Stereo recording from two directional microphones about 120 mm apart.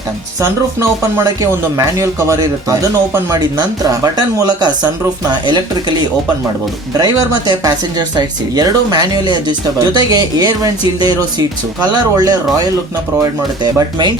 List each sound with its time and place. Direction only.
0.4 s speech: 25° right (ahead or behind)
7.0 s speech: 35° right (ahead or behind)